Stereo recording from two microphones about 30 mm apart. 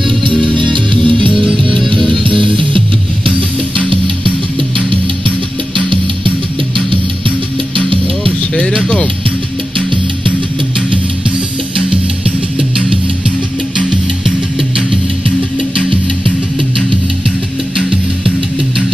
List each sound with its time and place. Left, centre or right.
0.3 s music: left
17.7 s music: right